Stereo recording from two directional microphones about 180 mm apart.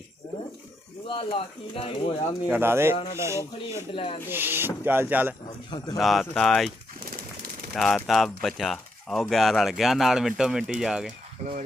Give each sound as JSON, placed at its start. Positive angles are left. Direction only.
{"t": 1.0, "sound": "speech", "side_deg": 30}
{"t": 2.5, "sound": "speech", "side_deg": -15}
{"t": 3.9, "sound": "speech", "side_deg": 30}
{"t": 4.3, "sound": "speech", "side_deg": -10}
{"t": 7.8, "sound": "speech", "side_deg": 0}